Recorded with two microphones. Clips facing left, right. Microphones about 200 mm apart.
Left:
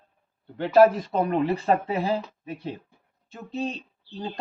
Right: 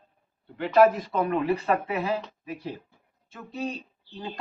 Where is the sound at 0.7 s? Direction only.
30° left (ahead or behind).